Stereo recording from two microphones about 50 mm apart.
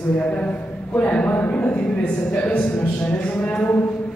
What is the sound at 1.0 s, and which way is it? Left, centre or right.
A man's voice, left.